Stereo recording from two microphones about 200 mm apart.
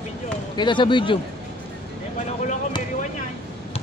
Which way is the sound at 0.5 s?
25° left (ahead or behind).